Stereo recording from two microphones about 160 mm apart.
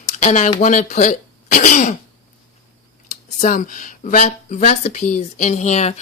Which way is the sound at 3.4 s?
50° left (ahead or behind).